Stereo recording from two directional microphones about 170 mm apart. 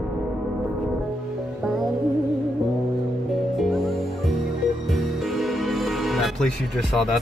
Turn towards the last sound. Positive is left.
turn(degrees=0)  # may be behind; listen again after turning